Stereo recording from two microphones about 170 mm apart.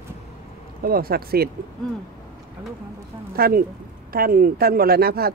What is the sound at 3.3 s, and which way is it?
Speech, 65° right (ahead or behind).